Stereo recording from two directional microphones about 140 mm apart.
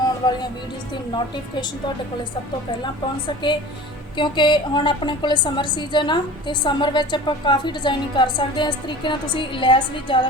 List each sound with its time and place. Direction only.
0.2 s speech: 25° left (ahead or behind)
2.8 s a woman's voice: 35° left (ahead or behind)